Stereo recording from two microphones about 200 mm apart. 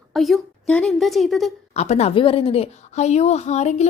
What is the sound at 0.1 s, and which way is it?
A woman's voice, centre (ahead or behind).